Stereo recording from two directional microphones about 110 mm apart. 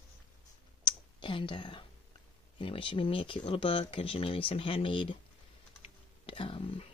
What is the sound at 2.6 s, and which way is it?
Speech, 50° left (ahead or behind).